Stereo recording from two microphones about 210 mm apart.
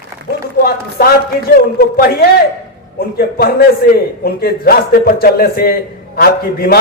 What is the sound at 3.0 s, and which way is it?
A man's voice, 45° left (ahead or behind).